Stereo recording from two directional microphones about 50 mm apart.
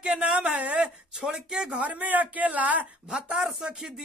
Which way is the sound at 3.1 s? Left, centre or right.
Centre.